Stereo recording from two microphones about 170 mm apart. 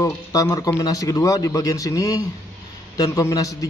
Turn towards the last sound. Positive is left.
turn(degrees=20)  # may be behind; listen again after turning